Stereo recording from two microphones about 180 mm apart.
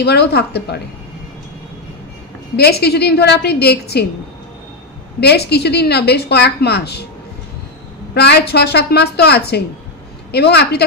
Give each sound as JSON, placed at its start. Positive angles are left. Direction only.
{"t": 0.0, "sound": "a woman's voice", "side_deg": 65}
{"t": 2.5, "sound": "a woman's voice", "side_deg": 60}
{"t": 5.2, "sound": "a woman's voice", "side_deg": 65}
{"t": 8.1, "sound": "a woman's voice", "side_deg": 65}